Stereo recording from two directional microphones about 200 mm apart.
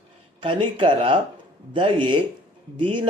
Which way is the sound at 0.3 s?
25° right (ahead or behind).